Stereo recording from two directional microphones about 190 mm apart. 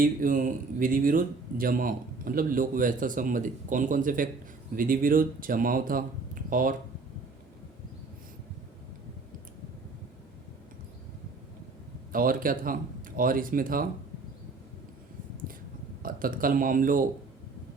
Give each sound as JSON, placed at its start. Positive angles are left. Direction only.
{"t": 0.0, "sound": "speech", "side_deg": -45}
{"t": 12.1, "sound": "speech", "side_deg": -50}
{"t": 16.0, "sound": "speech", "side_deg": -45}